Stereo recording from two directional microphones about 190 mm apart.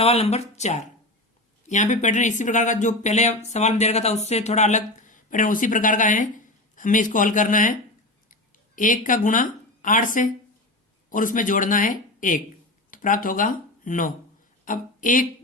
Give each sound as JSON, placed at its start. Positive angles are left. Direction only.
{"t": 0.0, "sound": "speech", "side_deg": 30}